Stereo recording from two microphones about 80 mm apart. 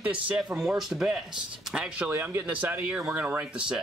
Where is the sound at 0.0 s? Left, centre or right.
Centre.